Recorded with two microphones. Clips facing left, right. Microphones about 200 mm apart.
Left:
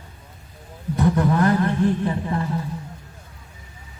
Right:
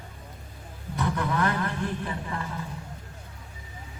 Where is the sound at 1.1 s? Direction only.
35° left (ahead or behind).